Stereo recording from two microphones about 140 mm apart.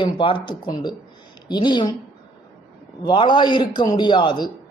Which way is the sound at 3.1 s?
35° left (ahead or behind).